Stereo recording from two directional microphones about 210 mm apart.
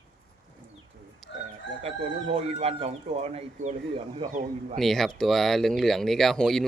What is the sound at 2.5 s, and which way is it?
Speech, 30° right (ahead or behind).